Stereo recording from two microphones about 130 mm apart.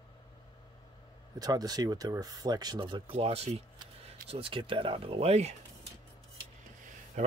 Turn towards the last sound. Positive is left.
turn(degrees=-70)  # may be behind; listen again after turning